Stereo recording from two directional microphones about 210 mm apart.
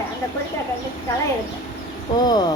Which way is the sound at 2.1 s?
20° left (ahead or behind).